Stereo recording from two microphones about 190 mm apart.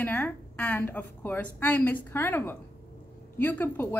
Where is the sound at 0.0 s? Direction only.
10° left (ahead or behind).